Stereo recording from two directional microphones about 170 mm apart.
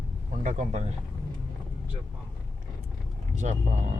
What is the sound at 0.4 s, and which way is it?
Speech, 45° right (ahead or behind).